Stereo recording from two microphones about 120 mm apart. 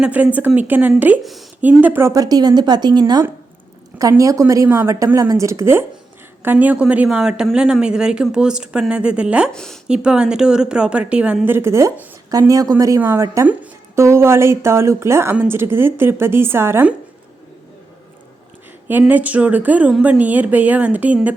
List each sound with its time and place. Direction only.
0.0 s a woman's voice: 10° right (ahead or behind)
1.2 s a woman's voice: centre (ahead or behind)
1.6 s a woman's voice: 15° right (ahead or behind)
9.5 s a woman's voice: 5° left (ahead or behind)
9.9 s a woman's voice: 10° right (ahead or behind); by 13.0 s 25° right (ahead or behind)
13.0 s a woman's voice: 15° right (ahead or behind)
18.9 s a woman's voice: 15° right (ahead or behind)